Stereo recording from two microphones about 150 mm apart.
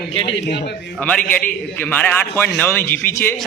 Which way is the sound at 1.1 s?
10° left (ahead or behind).